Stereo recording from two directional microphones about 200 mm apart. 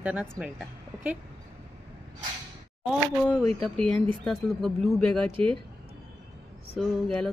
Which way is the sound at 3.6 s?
5° left (ahead or behind).